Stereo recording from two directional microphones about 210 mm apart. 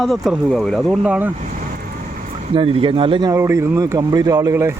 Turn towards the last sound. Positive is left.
turn(degrees=-15)  # may be behind; listen again after turning